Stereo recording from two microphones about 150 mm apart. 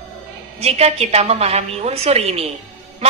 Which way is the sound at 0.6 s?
45° right (ahead or behind).